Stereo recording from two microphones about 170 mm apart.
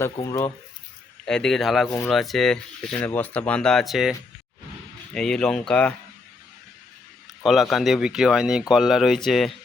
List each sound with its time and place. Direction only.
0.0 s speech: 20° left (ahead or behind)
1.2 s speech: 5° left (ahead or behind)
5.1 s speech: 5° left (ahead or behind)
7.4 s speech: centre (ahead or behind)